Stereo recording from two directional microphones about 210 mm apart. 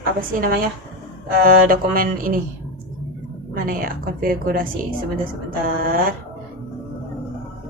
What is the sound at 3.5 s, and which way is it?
A woman's voice, 45° right (ahead or behind).